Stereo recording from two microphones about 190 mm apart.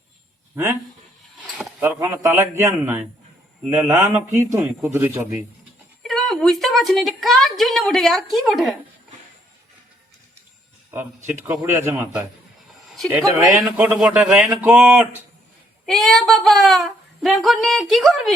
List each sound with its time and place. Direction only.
0.5 s speech: 15° right (ahead or behind)
6.0 s a woman's voice: centre (ahead or behind)
10.9 s speech: 10° right (ahead or behind)
13.2 s a woman's voice: 15° right (ahead or behind); by 18.3 s centre (ahead or behind)